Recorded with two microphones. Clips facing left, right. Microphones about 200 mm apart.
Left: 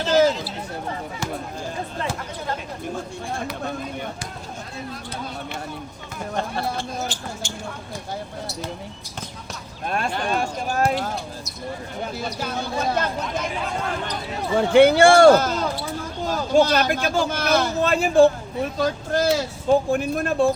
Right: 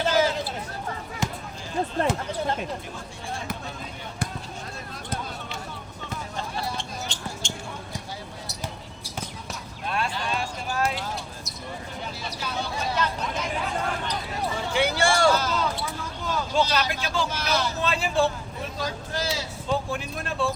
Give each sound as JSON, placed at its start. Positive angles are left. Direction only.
{"t": 0.1, "sound": "chatter", "side_deg": 45}
{"t": 3.6, "sound": "speech", "side_deg": 55}
{"t": 6.3, "sound": "basketball bounce", "side_deg": 60}
{"t": 7.4, "sound": "a sound", "side_deg": 5}
{"t": 9.8, "sound": "a sound", "side_deg": 45}
{"t": 12.0, "sound": "speech", "side_deg": 50}
{"t": 14.5, "sound": "speech", "side_deg": 55}